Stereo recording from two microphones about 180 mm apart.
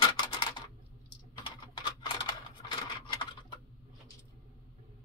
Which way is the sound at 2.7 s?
25° left (ahead or behind).